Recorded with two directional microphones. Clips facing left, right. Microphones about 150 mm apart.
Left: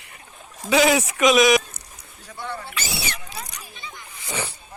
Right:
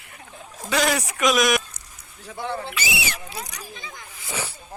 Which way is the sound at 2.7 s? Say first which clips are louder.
Right 2 dB; 5° right (ahead or behind).